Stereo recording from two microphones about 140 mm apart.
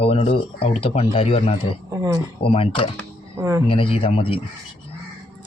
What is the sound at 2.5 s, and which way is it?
Speech, 40° left (ahead or behind).